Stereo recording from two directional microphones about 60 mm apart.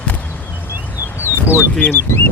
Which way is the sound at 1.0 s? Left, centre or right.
Left.